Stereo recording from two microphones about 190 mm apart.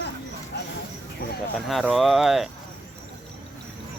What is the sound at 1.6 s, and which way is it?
Speech, centre (ahead or behind).